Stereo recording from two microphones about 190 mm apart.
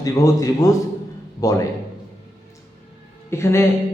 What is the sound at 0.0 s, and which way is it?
Speech, 15° left (ahead or behind).